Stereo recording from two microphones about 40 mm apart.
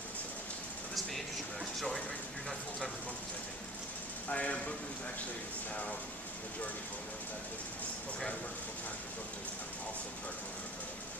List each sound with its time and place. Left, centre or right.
1.8 s speech: centre
4.3 s speech: left